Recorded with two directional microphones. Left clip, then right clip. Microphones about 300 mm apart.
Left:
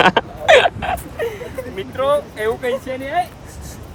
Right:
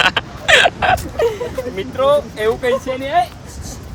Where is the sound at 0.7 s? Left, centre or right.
Right.